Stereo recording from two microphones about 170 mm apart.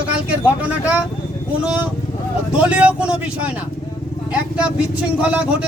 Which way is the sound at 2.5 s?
5° right (ahead or behind).